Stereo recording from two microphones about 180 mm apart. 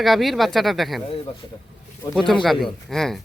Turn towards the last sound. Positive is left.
turn(degrees=0)  # may be behind; listen again after turning